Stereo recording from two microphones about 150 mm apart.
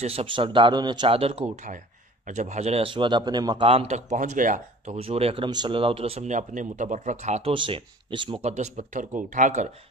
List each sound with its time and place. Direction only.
0.0 s speech: 40° right (ahead or behind)
2.2 s speech: 50° right (ahead or behind); by 3.6 s 25° right (ahead or behind)
3.6 s speech: 45° right (ahead or behind)
4.9 s speech: 40° right (ahead or behind)
7.5 s speech: 35° right (ahead or behind); by 9.7 s 55° right (ahead or behind)